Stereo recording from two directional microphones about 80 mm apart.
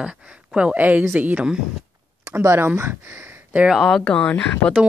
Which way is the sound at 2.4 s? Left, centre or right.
Right.